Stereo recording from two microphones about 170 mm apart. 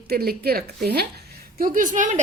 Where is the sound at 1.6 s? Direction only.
55° right (ahead or behind).